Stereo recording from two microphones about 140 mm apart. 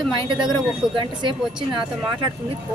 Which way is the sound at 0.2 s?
35° right (ahead or behind).